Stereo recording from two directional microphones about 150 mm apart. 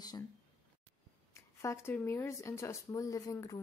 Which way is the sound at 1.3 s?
20° left (ahead or behind).